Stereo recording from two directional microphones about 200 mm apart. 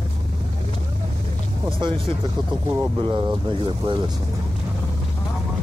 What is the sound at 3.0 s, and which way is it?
Speech, 25° right (ahead or behind).